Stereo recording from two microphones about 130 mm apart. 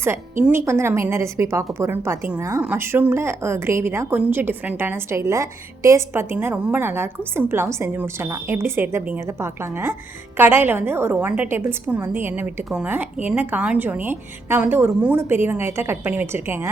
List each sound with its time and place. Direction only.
0.4 s a woman's voice: 20° right (ahead or behind)